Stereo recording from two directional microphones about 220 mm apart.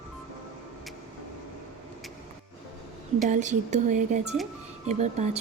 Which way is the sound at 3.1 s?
35° right (ahead or behind).